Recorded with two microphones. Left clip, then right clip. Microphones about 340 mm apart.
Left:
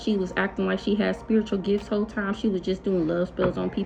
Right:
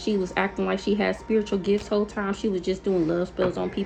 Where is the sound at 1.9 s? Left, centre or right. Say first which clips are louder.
Right 2 dB; right.